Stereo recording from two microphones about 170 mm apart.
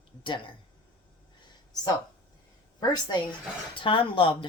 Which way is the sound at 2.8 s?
25° left (ahead or behind).